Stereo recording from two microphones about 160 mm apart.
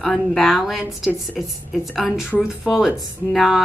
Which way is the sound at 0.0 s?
Centre (ahead or behind).